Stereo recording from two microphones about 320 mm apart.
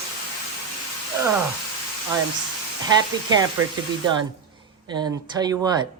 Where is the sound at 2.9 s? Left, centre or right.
Centre.